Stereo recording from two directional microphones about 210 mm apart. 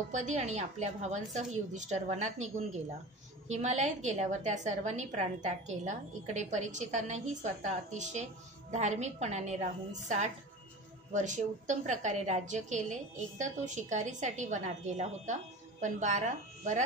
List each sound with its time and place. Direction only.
0.1 s a woman's voice: 35° right (ahead or behind)